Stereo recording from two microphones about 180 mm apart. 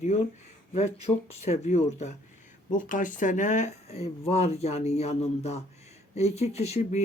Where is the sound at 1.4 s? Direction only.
40° left (ahead or behind).